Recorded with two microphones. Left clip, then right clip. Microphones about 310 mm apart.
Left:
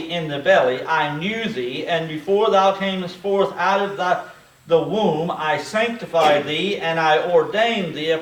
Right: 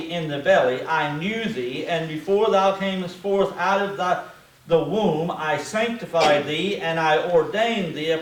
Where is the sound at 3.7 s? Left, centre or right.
Centre.